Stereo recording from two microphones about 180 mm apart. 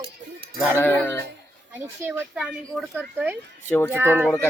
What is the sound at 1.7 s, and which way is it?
A child's voice, 10° right (ahead or behind).